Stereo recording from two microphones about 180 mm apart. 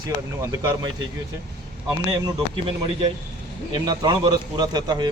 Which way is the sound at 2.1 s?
25° right (ahead or behind).